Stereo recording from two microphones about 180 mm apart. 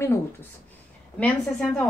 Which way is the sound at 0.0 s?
15° left (ahead or behind).